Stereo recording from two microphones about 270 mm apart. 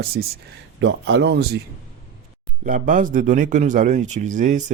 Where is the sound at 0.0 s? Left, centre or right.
Right.